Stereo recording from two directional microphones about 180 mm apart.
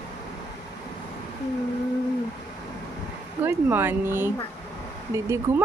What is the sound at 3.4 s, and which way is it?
Speech, 10° right (ahead or behind).